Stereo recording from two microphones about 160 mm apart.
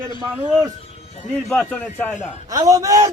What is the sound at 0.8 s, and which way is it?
Music, 40° left (ahead or behind).